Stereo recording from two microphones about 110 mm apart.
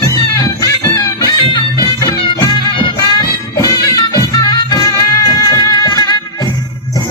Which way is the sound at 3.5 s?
35° left (ahead or behind).